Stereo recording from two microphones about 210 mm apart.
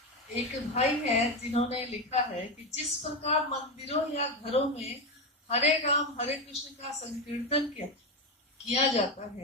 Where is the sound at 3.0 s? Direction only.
30° left (ahead or behind).